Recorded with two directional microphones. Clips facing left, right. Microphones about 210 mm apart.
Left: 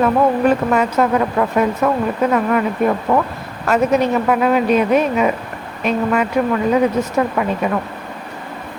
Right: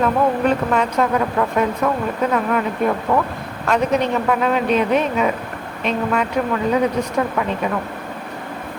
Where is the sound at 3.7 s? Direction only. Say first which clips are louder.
Left 3 dB; 5° left (ahead or behind).